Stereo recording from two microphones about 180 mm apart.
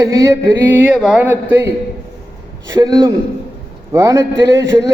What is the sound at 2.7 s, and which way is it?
A man's voice, 20° right (ahead or behind).